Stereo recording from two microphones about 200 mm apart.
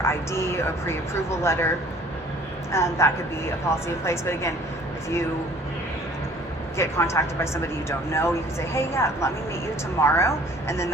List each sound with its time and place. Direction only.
0.0 s speech: 15° left (ahead or behind)
2.7 s speech: 15° left (ahead or behind)
6.7 s speech: 15° left (ahead or behind)